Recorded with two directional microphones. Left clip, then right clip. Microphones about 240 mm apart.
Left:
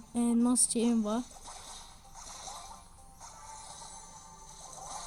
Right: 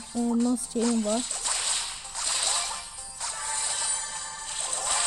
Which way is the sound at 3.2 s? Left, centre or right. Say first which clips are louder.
Right 16 dB; right.